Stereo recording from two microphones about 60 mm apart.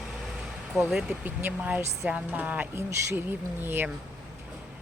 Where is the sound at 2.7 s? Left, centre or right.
Right.